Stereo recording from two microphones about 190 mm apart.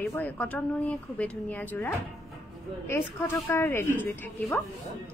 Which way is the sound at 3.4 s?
10° left (ahead or behind).